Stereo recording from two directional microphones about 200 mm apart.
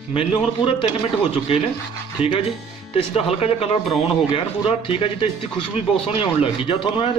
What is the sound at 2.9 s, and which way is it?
Speech, 30° left (ahead or behind).